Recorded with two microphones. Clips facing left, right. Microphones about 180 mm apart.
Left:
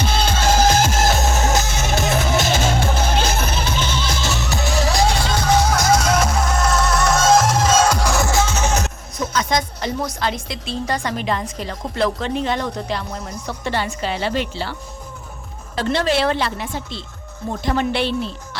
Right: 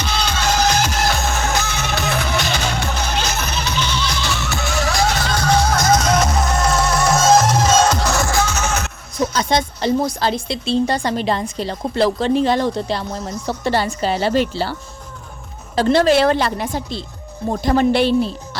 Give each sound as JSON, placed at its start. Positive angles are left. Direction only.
{"t": 0.0, "sound": "music", "side_deg": 50}
{"t": 9.1, "sound": "speech", "side_deg": -30}